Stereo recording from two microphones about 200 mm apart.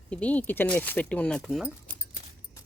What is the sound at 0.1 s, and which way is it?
Speech, 5° left (ahead or behind).